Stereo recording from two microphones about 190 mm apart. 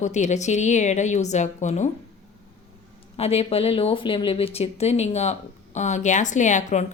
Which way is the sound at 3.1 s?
30° left (ahead or behind).